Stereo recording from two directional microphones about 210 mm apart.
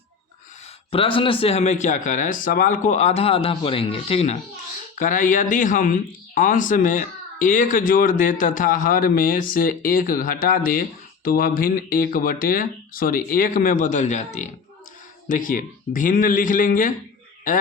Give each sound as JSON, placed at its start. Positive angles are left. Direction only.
{"t": 0.9, "sound": "speech", "side_deg": 25}